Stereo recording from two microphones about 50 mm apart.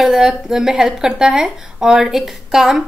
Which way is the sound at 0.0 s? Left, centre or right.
Centre.